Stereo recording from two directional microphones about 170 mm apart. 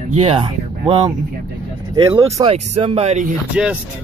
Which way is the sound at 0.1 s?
35° right (ahead or behind).